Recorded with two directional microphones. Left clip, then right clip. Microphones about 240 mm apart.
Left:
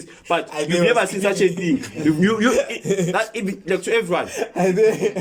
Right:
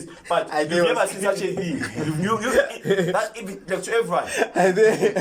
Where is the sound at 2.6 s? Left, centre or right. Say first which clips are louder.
Right 1 dB; centre.